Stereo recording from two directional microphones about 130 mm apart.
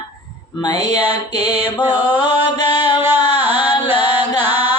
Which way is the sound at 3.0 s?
15° right (ahead or behind).